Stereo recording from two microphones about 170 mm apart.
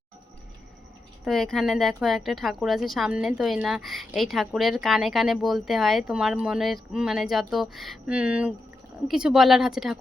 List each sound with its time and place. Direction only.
1.2 s speech: centre (ahead or behind)